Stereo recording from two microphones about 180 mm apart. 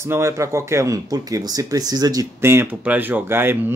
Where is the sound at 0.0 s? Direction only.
15° right (ahead or behind).